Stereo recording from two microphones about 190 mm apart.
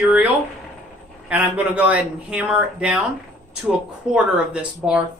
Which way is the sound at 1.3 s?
5° right (ahead or behind).